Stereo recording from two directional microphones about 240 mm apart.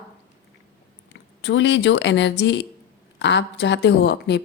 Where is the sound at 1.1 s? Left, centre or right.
Left.